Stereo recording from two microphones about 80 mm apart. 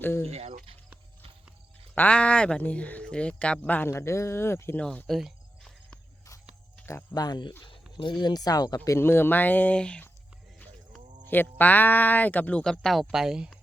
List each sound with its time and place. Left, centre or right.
0.0 s speech: left
2.0 s speech: centre
3.8 s speech: left
4.8 s speech: centre
5.0 s cricket: centre
7.1 s speech: left
7.9 s speech: left
8.8 s speech: left; by 10.0 s centre
11.3 s speech: left
12.6 s speech: centre
13.1 s speech: centre